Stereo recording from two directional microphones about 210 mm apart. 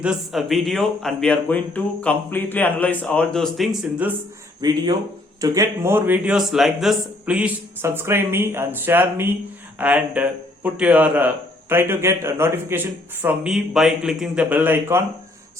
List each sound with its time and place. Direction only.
0.0 s speech: 5° right (ahead or behind)
4.6 s speech: 20° right (ahead or behind)